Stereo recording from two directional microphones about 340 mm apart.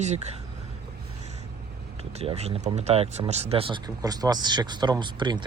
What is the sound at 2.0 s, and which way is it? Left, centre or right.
Speech, centre.